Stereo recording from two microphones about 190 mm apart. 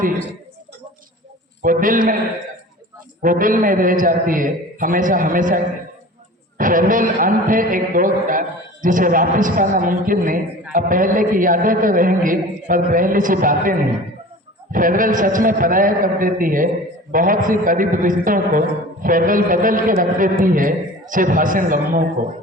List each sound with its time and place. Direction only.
1.6 s a man's voice: 45° right (ahead or behind)
3.2 s a man's voice: 45° right (ahead or behind)
6.6 s a man's voice: 45° right (ahead or behind)